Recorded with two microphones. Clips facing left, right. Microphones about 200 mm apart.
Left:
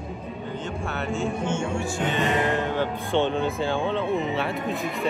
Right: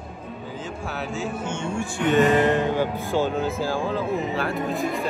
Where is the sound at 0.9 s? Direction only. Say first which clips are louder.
Left 2 dB; centre (ahead or behind).